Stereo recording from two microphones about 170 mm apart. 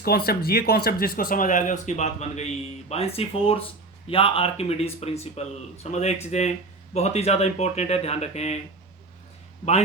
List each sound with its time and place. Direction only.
0.0 s speech: 65° left (ahead or behind); by 8.6 s 40° left (ahead or behind)